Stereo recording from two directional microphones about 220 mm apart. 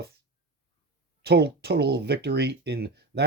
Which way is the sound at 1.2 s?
45° right (ahead or behind).